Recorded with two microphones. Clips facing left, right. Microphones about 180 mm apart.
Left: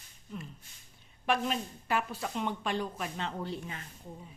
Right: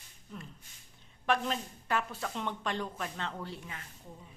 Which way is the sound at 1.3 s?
10° left (ahead or behind).